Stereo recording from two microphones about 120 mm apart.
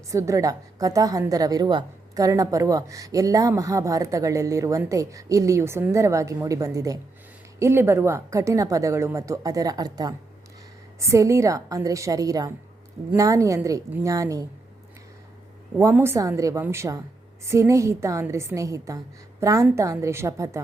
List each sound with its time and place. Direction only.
0.1 s a woman's voice: 25° right (ahead or behind)
15.8 s a woman's voice: 20° right (ahead or behind)